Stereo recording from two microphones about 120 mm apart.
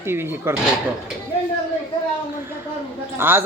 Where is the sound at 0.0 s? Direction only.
20° right (ahead or behind).